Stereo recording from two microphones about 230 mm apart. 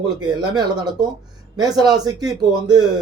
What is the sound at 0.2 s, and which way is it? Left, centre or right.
A man's voice, centre.